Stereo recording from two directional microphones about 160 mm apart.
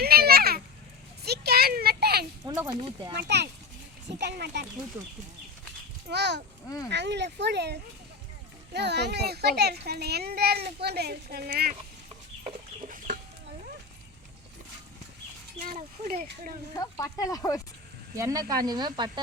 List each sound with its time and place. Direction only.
0.0 s children playing: 75° right (ahead or behind)
1.2 s a sound: 80° right
2.4 s a sound: 20° right (ahead or behind)
3.2 s speech: 90° right
6.1 s speech: 90° right
6.7 s speech: 20° left (ahead or behind)
6.9 s a child's voice: 90° right; by 11.8 s 65° right (ahead or behind)
15.6 s speech: 60° right (ahead or behind)
16.7 s speech: 20° left (ahead or behind)
18.2 s speech: 20° right (ahead or behind)